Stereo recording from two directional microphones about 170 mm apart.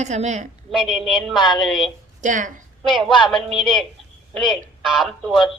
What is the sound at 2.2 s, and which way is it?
Speech, 50° right (ahead or behind).